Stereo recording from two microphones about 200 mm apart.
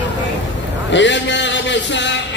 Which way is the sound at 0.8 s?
65° left (ahead or behind).